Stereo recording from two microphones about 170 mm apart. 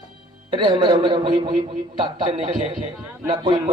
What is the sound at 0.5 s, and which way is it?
A man's voice, 30° right (ahead or behind).